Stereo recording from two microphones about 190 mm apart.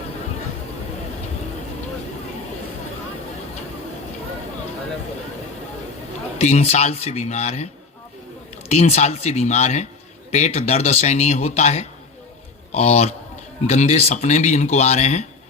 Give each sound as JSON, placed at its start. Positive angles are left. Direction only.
{"t": 6.4, "sound": "speech", "side_deg": 35}
{"t": 8.7, "sound": "speech", "side_deg": 35}